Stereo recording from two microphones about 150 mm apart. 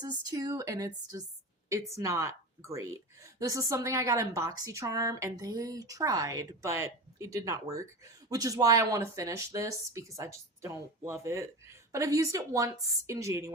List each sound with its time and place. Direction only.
0.0 s speech: 30° right (ahead or behind)